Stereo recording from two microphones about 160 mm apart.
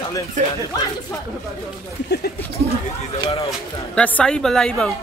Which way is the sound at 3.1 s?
35° left (ahead or behind).